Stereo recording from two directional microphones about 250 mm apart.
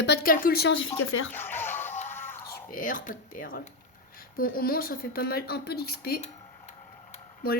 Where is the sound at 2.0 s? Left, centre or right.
Centre.